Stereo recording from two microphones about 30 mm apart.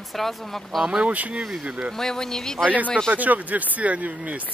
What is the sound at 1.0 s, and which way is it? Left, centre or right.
Speech, right.